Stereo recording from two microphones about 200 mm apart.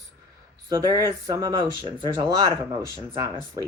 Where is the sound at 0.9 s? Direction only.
15° right (ahead or behind).